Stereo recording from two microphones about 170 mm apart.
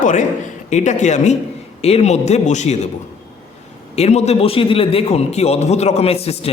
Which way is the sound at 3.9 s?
40° left (ahead or behind).